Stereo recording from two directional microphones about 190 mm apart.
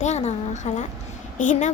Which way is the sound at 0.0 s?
35° left (ahead or behind).